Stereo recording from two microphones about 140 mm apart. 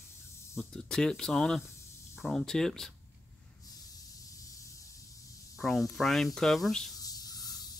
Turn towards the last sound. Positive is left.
turn(degrees=25)  # may be behind; listen again after turning